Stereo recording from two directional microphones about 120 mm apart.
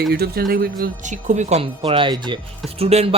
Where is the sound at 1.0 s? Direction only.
85° right.